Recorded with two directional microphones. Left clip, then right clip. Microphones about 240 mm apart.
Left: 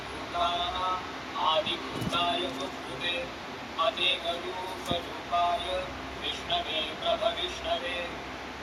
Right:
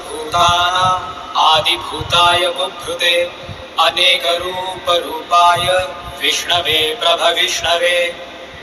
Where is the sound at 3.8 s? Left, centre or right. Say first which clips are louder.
Right 15 dB; right.